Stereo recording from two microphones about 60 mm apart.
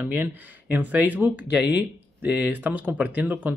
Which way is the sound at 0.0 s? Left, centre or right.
Right.